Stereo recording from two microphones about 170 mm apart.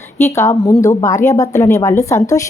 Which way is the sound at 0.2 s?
15° left (ahead or behind).